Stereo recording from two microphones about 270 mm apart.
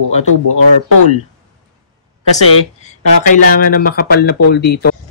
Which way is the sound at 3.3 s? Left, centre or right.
Left.